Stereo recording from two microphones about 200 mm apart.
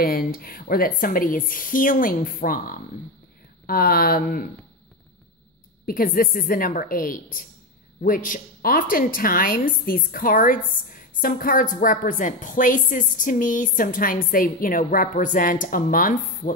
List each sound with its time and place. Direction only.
0.0 s a woman's voice: 50° left (ahead or behind)
5.9 s a woman's voice: 45° left (ahead or behind)